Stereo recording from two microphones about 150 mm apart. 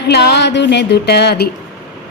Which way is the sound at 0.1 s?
90° left.